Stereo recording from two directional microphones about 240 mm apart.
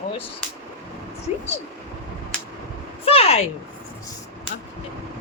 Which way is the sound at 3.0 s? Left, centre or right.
Left.